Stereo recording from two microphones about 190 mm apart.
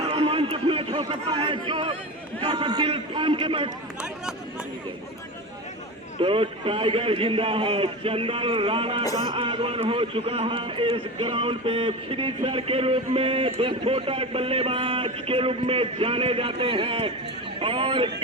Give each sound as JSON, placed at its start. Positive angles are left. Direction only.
{"t": 0.1, "sound": "a sound", "side_deg": -30}
{"t": 1.6, "sound": "a man's voice", "side_deg": -30}
{"t": 6.1, "sound": "a man's voice", "side_deg": -30}